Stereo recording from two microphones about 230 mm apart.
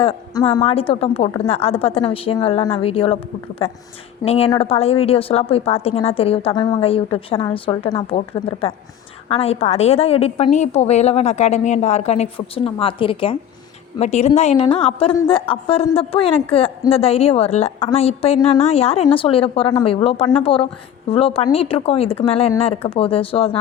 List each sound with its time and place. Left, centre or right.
0.0 s a woman's voice: left
4.2 s a woman's voice: left